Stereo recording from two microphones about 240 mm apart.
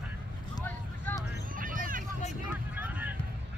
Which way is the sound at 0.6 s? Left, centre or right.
Centre.